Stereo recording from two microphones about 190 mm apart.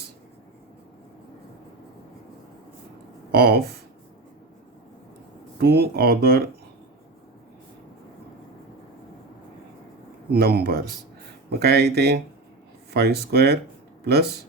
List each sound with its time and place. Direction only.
3.3 s speech: 55° right (ahead or behind)
5.5 s speech: 55° right (ahead or behind)
10.3 s speech: 55° right (ahead or behind)